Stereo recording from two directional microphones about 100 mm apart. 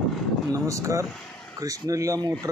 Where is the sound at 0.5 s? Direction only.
30° right (ahead or behind).